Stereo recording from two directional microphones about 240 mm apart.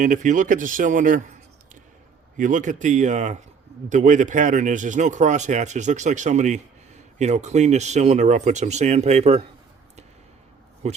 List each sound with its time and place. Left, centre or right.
0.0 s speech: right
2.4 s speech: right
10.8 s speech: right